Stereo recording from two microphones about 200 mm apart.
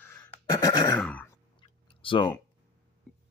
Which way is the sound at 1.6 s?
25° left (ahead or behind).